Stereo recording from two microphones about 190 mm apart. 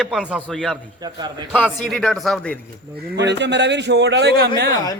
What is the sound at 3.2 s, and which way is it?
Speech, 65° right (ahead or behind).